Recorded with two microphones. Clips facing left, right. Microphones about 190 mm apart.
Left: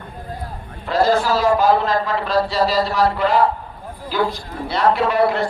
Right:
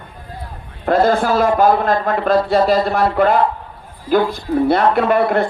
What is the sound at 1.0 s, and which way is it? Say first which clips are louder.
A man's voice: left 1 dB; 55° right (ahead or behind).